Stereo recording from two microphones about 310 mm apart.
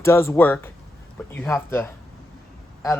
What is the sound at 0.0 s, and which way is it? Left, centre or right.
Speech, centre.